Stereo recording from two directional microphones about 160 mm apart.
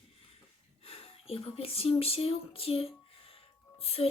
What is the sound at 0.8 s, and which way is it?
Speech, 40° left (ahead or behind).